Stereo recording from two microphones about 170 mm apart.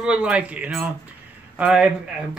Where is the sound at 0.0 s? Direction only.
5° right (ahead or behind).